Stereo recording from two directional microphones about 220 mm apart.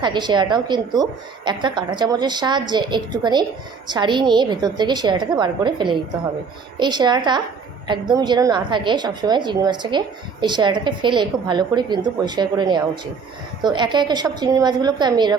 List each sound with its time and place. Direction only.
0.0 s a woman's voice: 20° right (ahead or behind)